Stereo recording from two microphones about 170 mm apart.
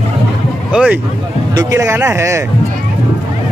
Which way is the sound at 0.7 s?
5° right (ahead or behind).